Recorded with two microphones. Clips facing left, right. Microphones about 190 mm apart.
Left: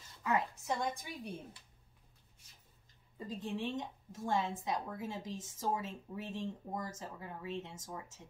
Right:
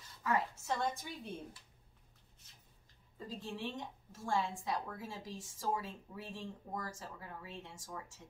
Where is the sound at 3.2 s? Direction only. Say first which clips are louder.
Left 4 dB; 20° left (ahead or behind).